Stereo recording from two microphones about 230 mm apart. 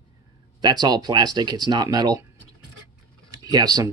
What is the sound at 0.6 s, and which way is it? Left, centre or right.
Speech, centre.